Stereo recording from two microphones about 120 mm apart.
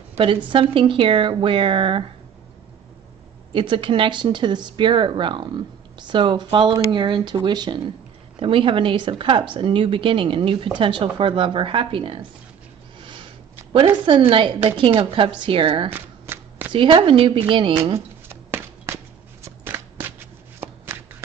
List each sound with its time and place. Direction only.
0.5 s a woman's voice: 45° right (ahead or behind)
3.5 s a woman's voice: 45° right (ahead or behind)
14.3 s a woman's voice: 45° right (ahead or behind)
15.9 s shuffling cards: 15° right (ahead or behind)
16.7 s a woman's voice: 45° right (ahead or behind)
17.9 s a sound: 20° right (ahead or behind)
19.4 s shuffling cards: 15° right (ahead or behind)